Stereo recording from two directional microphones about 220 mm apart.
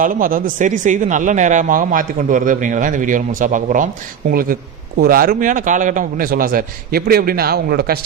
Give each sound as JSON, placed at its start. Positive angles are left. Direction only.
{"t": 0.0, "sound": "speech", "side_deg": -40}